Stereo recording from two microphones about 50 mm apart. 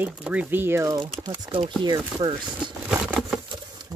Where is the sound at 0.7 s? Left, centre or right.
Right.